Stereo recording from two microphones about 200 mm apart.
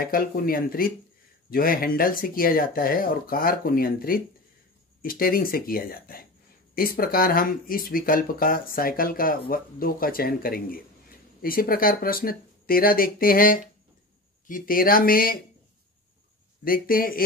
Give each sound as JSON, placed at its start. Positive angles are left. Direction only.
{"t": 0.0, "sound": "speech", "side_deg": 45}
{"t": 16.6, "sound": "speech", "side_deg": 45}